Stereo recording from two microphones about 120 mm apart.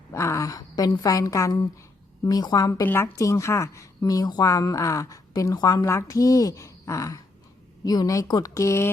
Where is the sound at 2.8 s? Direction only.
15° left (ahead or behind).